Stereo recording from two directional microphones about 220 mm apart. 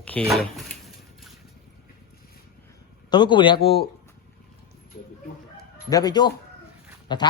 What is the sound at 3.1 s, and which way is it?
Speech, 20° left (ahead or behind).